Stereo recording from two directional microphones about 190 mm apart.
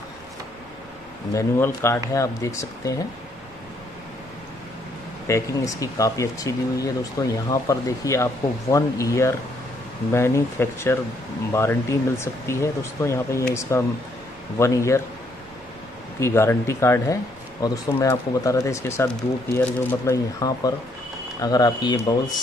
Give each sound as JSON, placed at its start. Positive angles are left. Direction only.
{"t": 1.3, "sound": "speech", "side_deg": 15}
{"t": 5.2, "sound": "speech", "side_deg": 15}
{"t": 16.2, "sound": "speech", "side_deg": 15}